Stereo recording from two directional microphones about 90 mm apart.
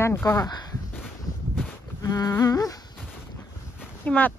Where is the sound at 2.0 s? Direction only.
40° left (ahead or behind).